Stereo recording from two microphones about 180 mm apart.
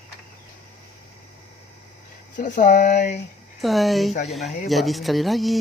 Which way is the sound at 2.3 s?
45° left (ahead or behind).